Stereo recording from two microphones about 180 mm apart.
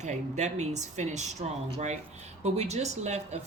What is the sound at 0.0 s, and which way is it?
Speech, 40° right (ahead or behind).